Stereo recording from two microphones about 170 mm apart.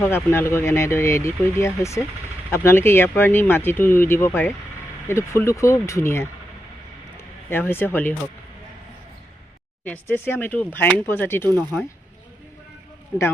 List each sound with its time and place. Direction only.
0.0 s speech: 15° left (ahead or behind)
7.5 s speech: 15° left (ahead or behind)
9.8 s speech: 10° left (ahead or behind)
13.1 s speech: 10° left (ahead or behind)